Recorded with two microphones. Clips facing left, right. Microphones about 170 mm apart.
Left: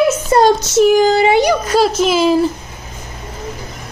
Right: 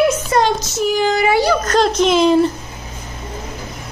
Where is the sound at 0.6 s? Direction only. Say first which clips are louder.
Left 8 dB; 70° left (ahead or behind).